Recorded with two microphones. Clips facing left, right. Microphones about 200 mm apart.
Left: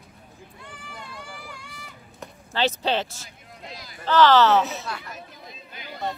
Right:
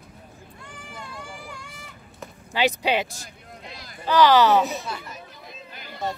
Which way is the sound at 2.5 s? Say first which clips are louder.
Right 1 dB; 15° right (ahead or behind).